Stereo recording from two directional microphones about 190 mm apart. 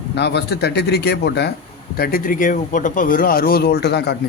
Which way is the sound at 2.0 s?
50° left (ahead or behind).